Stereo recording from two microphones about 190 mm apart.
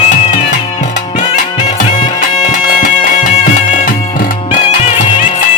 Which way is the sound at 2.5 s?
45° left (ahead or behind).